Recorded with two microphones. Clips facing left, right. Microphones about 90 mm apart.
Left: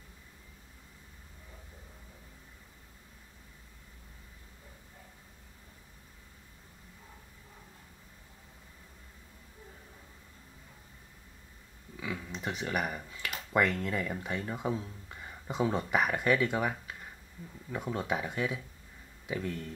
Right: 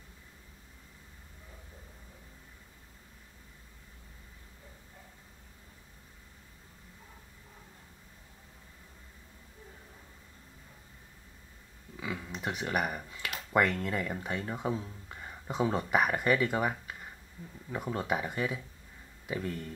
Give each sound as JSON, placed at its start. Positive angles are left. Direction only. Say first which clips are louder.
{"t": 12.0, "sound": "speech", "louder": "right 1 dB", "side_deg": -5}